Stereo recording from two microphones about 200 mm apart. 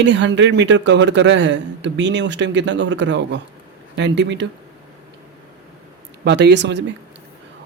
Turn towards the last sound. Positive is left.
turn(degrees=-60)  # may be behind; listen again after turning